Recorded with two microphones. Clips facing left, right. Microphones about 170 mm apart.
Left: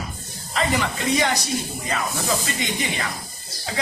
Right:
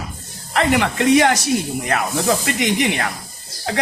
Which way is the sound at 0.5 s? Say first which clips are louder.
Right 6 dB; 70° right (ahead or behind).